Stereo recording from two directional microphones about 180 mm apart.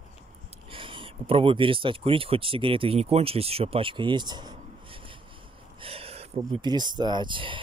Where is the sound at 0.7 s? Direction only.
30° right (ahead or behind).